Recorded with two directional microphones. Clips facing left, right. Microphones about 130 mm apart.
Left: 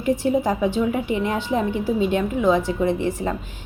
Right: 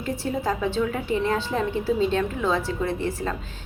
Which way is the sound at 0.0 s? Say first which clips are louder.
Left 7 dB; 15° left (ahead or behind).